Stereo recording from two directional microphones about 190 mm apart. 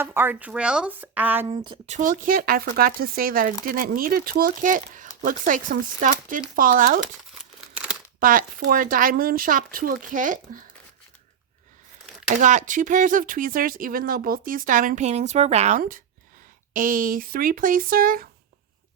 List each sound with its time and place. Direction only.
0.0 s a woman's voice: 10° right (ahead or behind)
1.5 s speech: 25° right (ahead or behind)
2.0 s speech: 45° right (ahead or behind)
8.2 s speech: 45° right (ahead or behind)
12.4 s speech: 40° right (ahead or behind)